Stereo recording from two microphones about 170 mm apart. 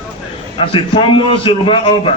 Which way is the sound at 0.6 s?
30° left (ahead or behind).